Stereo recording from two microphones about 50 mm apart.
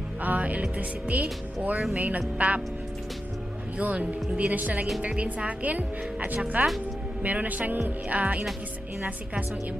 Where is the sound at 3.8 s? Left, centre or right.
Right.